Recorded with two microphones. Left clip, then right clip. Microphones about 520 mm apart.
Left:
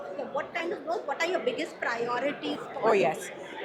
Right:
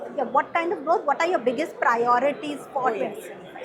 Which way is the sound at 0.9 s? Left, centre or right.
Right.